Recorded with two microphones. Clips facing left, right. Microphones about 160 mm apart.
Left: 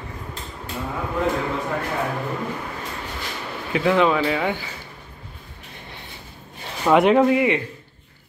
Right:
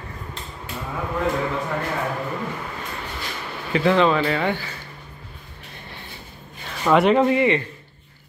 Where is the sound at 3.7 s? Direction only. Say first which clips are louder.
Right 1 dB; 5° left (ahead or behind).